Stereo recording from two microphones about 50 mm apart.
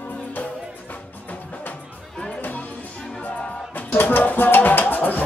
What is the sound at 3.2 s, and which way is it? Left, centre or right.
Music, left.